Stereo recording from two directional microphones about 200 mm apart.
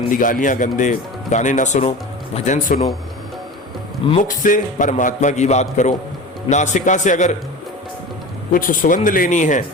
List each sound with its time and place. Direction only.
0.1 s speech: 40° left (ahead or behind)
4.2 s speech: 40° left (ahead or behind)
8.5 s speech: 45° left (ahead or behind)